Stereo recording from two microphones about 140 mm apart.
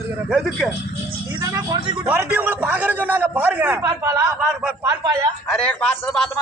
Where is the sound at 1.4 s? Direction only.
30° right (ahead or behind).